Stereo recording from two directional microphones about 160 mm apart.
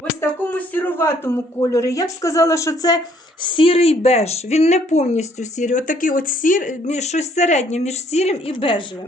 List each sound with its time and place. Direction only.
0.2 s speech: 10° left (ahead or behind)
3.4 s speech: 30° left (ahead or behind)